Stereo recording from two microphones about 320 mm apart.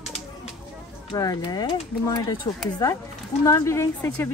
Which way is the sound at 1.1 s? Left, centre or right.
Centre.